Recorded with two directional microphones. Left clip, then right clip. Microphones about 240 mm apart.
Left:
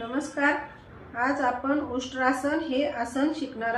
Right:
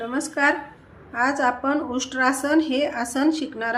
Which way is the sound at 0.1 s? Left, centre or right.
Right.